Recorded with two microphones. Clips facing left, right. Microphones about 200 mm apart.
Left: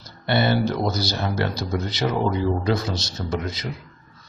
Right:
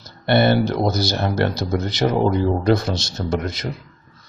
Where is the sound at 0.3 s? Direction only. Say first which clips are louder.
Right 4 dB; 60° right (ahead or behind).